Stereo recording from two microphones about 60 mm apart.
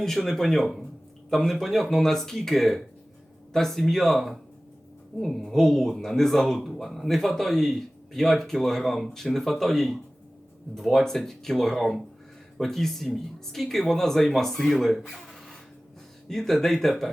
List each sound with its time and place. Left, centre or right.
0.0 s speech: centre